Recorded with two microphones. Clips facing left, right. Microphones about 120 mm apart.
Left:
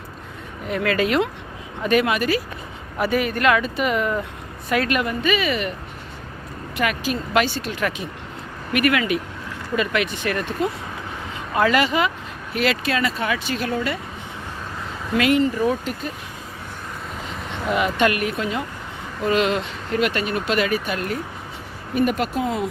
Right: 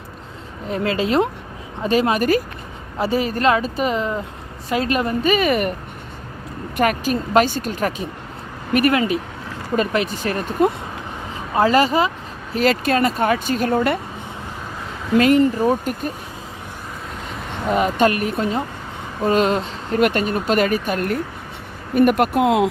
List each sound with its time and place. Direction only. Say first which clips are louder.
0.7 s speech: right 1 dB; 30° right (ahead or behind)
3.0 s speech: right 1 dB; 30° right (ahead or behind); by 5.7 s 50° right (ahead or behind)
6.7 s speech: right 5 dB; 45° right (ahead or behind)
11.5 s speech: right 3 dB; 35° right (ahead or behind); by 14.0 s 50° right (ahead or behind)
15.5 s speech: right 3 dB; 45° right (ahead or behind)
17.7 s speech: right 3 dB; 40° right (ahead or behind); by 22.7 s 85° right